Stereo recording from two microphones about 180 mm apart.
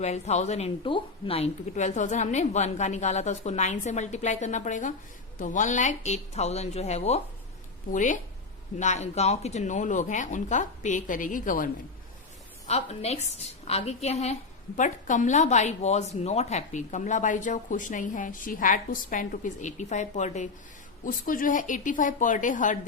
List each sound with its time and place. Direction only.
0.0 s a woman's voice: 40° left (ahead or behind)
12.6 s a woman's voice: 35° left (ahead or behind)